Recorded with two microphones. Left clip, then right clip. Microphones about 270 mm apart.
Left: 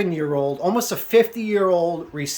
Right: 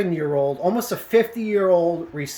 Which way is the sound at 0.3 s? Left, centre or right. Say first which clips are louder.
Right 1 dB; centre.